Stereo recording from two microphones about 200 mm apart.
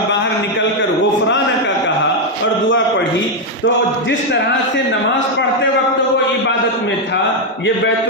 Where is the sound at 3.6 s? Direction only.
65° left (ahead or behind).